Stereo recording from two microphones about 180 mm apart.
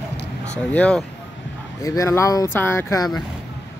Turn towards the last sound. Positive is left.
turn(degrees=15)  # may be behind; listen again after turning